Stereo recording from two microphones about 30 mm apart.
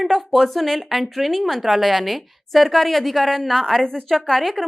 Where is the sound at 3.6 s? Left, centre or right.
Centre.